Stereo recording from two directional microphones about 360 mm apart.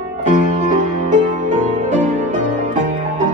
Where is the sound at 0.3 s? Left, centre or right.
Right.